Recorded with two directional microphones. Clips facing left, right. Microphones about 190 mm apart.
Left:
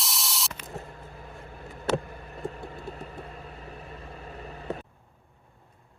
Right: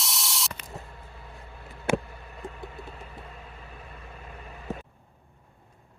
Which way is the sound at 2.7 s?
40° left (ahead or behind).